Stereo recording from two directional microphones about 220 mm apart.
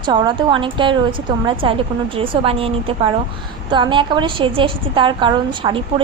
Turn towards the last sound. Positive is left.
turn(degrees=-20)  # may be behind; listen again after turning